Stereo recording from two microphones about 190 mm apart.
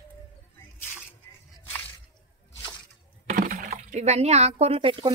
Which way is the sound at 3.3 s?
45° right (ahead or behind).